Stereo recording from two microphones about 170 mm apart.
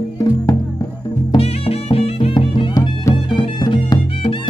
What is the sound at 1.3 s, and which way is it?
Music, 35° left (ahead or behind).